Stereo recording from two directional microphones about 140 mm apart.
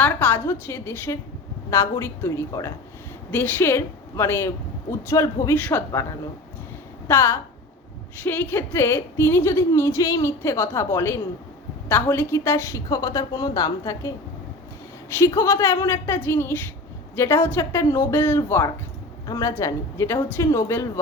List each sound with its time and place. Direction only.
0.0 s a woman's voice: 15° left (ahead or behind)
5.5 s a woman's voice: 10° left (ahead or behind)
7.1 s a woman's voice: 15° left (ahead or behind)
15.1 s a woman's voice: 20° left (ahead or behind)